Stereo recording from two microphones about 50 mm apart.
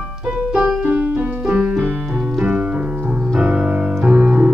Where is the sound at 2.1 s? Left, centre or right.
Centre.